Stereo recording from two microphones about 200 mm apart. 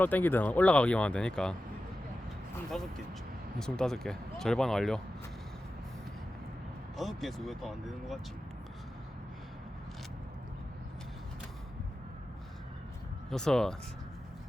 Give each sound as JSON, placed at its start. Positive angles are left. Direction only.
{"t": 0.0, "sound": "speech", "side_deg": 10}
{"t": 2.7, "sound": "speech", "side_deg": 5}
{"t": 6.9, "sound": "speech", "side_deg": 0}
{"t": 13.3, "sound": "speech", "side_deg": 5}